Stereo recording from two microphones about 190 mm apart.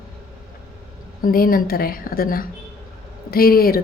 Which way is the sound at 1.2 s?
50° left (ahead or behind).